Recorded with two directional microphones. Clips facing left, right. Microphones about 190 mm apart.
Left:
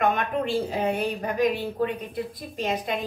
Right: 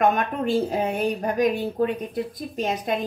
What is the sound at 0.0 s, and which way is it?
Speech, 45° right (ahead or behind).